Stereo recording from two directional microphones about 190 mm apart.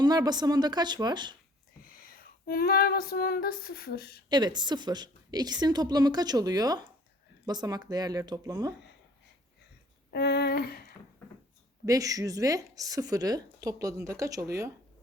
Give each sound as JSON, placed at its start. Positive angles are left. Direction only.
{"t": 0.0, "sound": "a woman's voice", "side_deg": -20}
{"t": 1.8, "sound": "female singing", "side_deg": 50}
{"t": 4.3, "sound": "a woman's voice", "side_deg": -20}
{"t": 10.1, "sound": "a sound", "side_deg": 60}
{"t": 11.9, "sound": "a woman's voice", "side_deg": -20}